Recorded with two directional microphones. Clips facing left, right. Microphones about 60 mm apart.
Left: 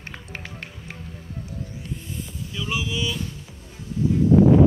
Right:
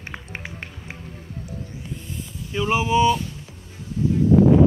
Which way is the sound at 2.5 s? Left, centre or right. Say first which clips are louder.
Right 9 dB; right.